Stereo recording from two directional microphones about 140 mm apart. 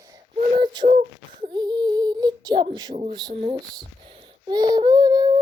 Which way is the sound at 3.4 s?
40° right (ahead or behind).